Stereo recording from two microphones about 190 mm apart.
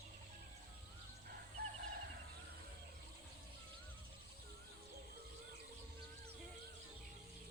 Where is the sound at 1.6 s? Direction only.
55° right (ahead or behind).